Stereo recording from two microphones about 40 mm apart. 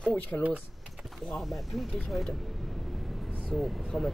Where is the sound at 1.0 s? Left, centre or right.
Centre.